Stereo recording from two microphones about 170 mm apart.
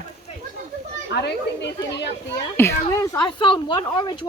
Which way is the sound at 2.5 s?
15° left (ahead or behind).